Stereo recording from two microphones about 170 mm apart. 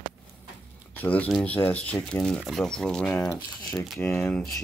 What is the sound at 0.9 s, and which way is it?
Speech, 10° left (ahead or behind).